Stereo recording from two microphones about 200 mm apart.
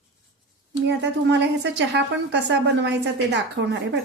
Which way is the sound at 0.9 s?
60° right (ahead or behind).